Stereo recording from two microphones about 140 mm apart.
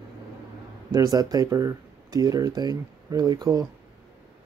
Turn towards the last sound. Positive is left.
turn(degrees=-25)  # may be behind; listen again after turning